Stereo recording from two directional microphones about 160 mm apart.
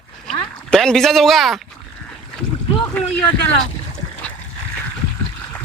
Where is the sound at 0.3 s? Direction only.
5° left (ahead or behind).